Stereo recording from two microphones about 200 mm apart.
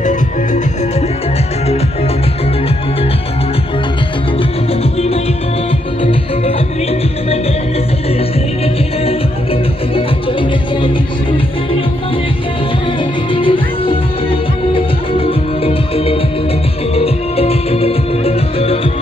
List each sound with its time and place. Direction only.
13.3 s music: 25° left (ahead or behind)